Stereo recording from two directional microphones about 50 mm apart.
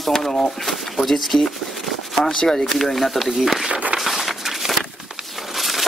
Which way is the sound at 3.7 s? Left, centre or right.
Right.